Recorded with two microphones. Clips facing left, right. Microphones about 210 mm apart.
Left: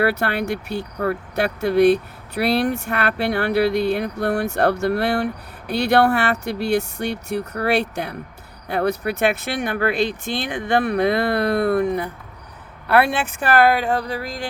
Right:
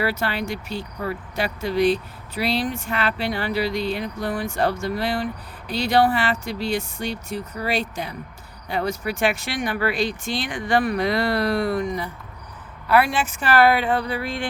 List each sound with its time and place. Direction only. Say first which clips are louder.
0.0 s speech: left 4 dB; 60° left (ahead or behind)
10.5 s speech: left 2 dB; 60° left (ahead or behind); by 14.4 s 40° left (ahead or behind)